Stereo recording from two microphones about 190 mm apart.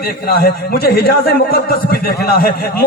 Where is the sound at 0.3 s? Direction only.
55° left (ahead or behind).